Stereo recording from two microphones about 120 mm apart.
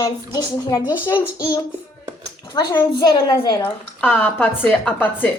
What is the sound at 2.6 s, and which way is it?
A child's voice, 35° left (ahead or behind).